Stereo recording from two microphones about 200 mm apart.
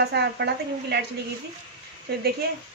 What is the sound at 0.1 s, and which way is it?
Speech, 60° right (ahead or behind).